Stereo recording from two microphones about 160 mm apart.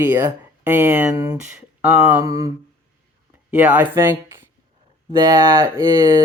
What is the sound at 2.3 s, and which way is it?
Speech, 20° right (ahead or behind).